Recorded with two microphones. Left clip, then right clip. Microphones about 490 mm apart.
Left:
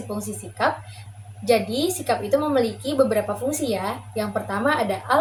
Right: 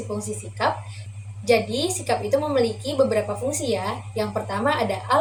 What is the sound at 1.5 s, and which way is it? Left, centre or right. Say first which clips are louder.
A woman's voice: even; left.